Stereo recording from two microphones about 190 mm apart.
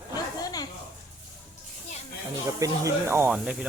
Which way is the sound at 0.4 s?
20° left (ahead or behind).